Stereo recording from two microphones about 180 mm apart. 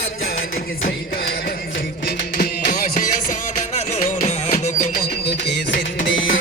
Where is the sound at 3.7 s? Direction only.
40° left (ahead or behind).